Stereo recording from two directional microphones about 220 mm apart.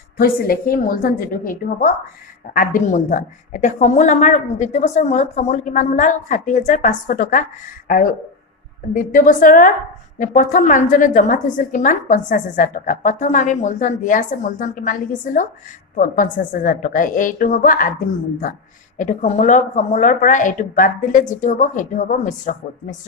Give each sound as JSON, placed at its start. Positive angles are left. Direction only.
{"t": 0.2, "sound": "a woman's voice", "side_deg": 40}
{"t": 8.9, "sound": "a woman's voice", "side_deg": 40}
{"t": 18.9, "sound": "a woman's voice", "side_deg": 35}